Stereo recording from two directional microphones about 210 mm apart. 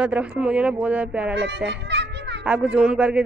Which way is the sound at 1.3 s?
55° right (ahead or behind).